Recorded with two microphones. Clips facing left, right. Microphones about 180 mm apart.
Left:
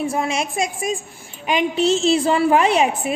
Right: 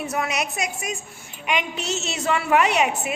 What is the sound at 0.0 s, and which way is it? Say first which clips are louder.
A woman's voice: left 4 dB; 25° left (ahead or behind).